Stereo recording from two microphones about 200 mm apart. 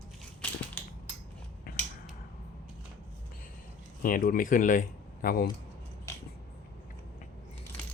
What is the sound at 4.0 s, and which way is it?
Speech, 45° left (ahead or behind).